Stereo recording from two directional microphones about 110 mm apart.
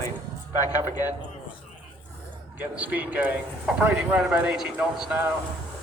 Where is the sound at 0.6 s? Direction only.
35° left (ahead or behind).